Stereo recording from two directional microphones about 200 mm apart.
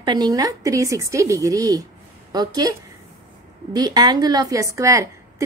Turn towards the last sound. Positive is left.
turn(degrees=-15)  # may be behind; listen again after turning